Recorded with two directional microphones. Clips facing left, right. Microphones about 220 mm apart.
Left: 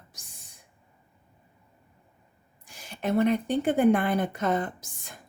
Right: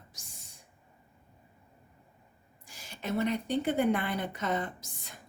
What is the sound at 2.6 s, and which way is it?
A woman's voice, 55° left (ahead or behind).